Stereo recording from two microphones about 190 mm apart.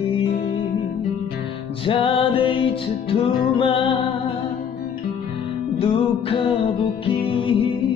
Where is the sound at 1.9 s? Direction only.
25° left (ahead or behind).